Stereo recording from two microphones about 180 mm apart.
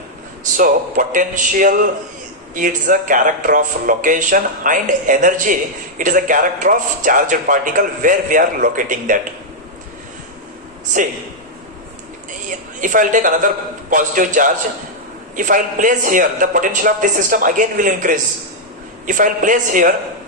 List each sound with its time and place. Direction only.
0.5 s a man's voice: 50° right (ahead or behind)
12.5 s a man's voice: 45° right (ahead or behind)